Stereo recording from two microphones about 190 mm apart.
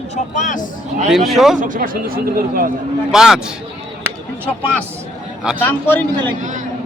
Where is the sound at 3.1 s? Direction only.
5° right (ahead or behind).